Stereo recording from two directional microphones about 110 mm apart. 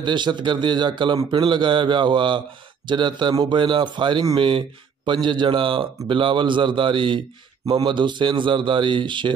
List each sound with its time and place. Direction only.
0.0 s speech: 45° right (ahead or behind)